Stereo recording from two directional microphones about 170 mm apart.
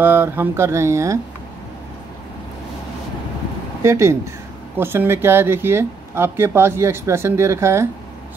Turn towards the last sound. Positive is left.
turn(degrees=-15)  # may be behind; listen again after turning